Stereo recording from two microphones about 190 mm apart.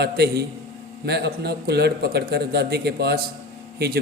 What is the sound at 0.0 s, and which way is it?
Speech, 60° right (ahead or behind).